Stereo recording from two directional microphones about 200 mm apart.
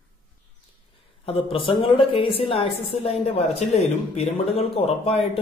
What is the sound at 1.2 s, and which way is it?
A woman's voice, 25° left (ahead or behind).